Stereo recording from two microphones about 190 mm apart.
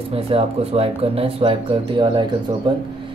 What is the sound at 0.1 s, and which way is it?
Speech, 30° right (ahead or behind).